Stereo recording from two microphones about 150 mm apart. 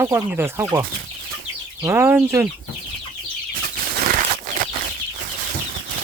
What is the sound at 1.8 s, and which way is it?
Speech, 15° right (ahead or behind).